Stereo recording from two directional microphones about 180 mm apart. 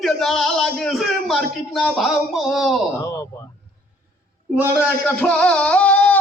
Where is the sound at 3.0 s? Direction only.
15° left (ahead or behind).